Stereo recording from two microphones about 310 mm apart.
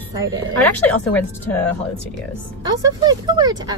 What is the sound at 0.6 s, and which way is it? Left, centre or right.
Speech, centre.